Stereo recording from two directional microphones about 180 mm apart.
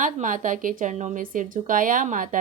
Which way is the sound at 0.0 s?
45° right (ahead or behind).